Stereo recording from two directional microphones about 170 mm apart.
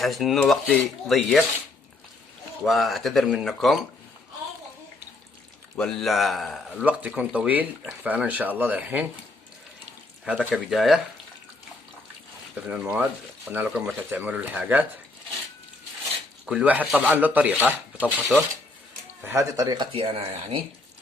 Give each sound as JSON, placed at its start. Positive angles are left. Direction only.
{"t": 0.0, "sound": "speech", "side_deg": 0}
{"t": 2.6, "sound": "speech", "side_deg": 0}
{"t": 5.7, "sound": "a man's voice", "side_deg": 0}
{"t": 10.2, "sound": "speech", "side_deg": -5}
{"t": 12.5, "sound": "a man's voice", "side_deg": -5}
{"t": 16.5, "sound": "a man's voice", "side_deg": -5}
{"t": 19.2, "sound": "speech", "side_deg": -15}